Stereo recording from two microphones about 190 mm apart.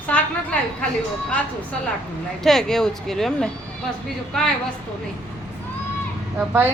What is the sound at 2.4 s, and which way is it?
Speech, centre (ahead or behind).